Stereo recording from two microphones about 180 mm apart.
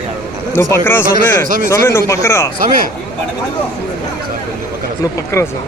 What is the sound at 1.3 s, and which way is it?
Speech, 50° right (ahead or behind).